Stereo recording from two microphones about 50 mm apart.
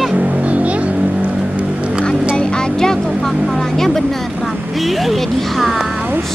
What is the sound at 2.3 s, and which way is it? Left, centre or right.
Vehicle, centre.